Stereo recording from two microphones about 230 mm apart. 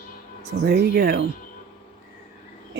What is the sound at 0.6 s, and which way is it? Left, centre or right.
Speech, right.